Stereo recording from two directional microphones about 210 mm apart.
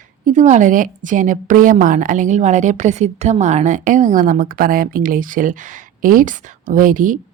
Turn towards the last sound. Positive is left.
turn(degrees=-40)  # may be behind; listen again after turning